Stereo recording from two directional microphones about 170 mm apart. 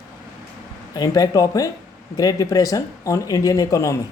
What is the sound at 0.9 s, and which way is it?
Speech, 20° left (ahead or behind).